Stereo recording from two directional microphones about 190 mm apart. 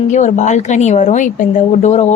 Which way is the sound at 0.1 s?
40° left (ahead or behind).